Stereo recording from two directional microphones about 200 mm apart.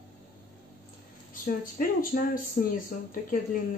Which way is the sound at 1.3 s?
45° left (ahead or behind).